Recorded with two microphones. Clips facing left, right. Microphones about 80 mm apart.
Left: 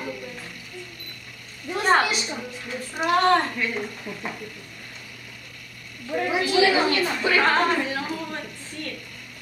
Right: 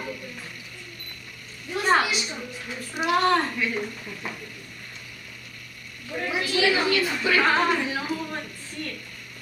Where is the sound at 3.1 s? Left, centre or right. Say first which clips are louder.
Left 2 dB; centre.